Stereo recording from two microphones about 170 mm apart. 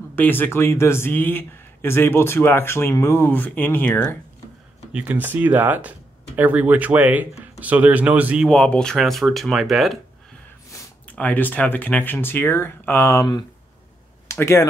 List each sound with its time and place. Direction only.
0.1 s speech: 10° left (ahead or behind)
4.9 s speech: 10° right (ahead or behind)
8.5 s speech: 5° left (ahead or behind)
10.7 s speech: 10° left (ahead or behind)